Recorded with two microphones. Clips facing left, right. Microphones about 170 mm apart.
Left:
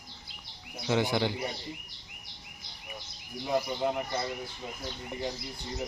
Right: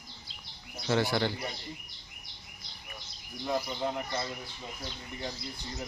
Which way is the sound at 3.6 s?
15° left (ahead or behind).